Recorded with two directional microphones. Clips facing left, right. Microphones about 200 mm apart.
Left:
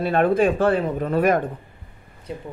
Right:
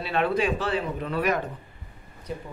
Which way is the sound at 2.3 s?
25° left (ahead or behind).